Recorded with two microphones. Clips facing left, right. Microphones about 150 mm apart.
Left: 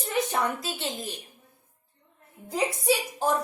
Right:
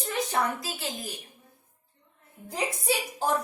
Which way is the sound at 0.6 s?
25° left (ahead or behind).